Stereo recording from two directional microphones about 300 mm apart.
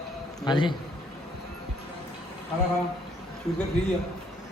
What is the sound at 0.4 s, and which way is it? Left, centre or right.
Speech, centre.